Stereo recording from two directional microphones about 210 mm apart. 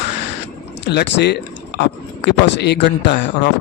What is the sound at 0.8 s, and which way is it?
Speech, 55° left (ahead or behind).